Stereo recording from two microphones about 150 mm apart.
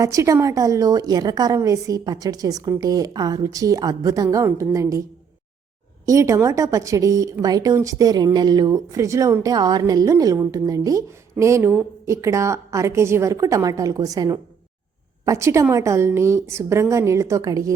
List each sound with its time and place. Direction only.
0.0 s a woman's voice: 20° right (ahead or behind)
6.1 s a woman's voice: 20° right (ahead or behind)